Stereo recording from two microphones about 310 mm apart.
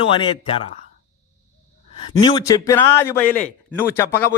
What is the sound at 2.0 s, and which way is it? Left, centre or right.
A man's voice, centre.